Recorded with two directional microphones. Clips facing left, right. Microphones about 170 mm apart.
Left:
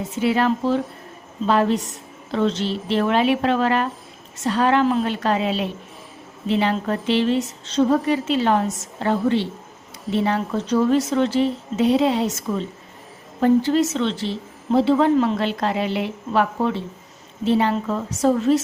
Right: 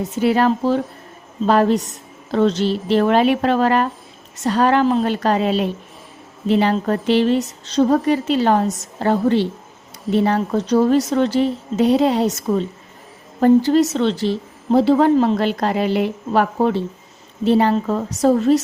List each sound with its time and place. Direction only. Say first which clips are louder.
0.2 s a woman's voice: right 3 dB; 40° right (ahead or behind)